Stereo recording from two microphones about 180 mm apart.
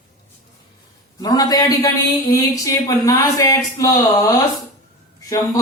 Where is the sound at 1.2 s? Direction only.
20° left (ahead or behind).